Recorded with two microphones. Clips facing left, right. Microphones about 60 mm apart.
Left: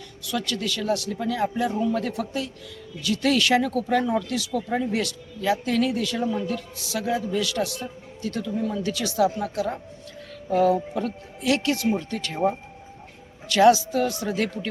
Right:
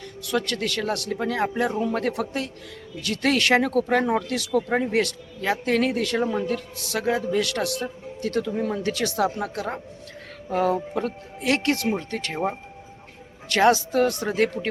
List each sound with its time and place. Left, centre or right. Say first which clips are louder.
0.2 s speech: right 3 dB; right
6.7 s speech: right 1 dB; right
7.3 s speech: right 1 dB; right
13.5 s speech: left 2 dB; right
14.3 s speech: right 3 dB; right